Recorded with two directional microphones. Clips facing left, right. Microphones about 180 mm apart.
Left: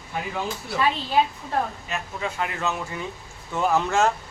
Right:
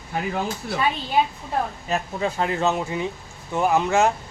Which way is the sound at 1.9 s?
35° right (ahead or behind).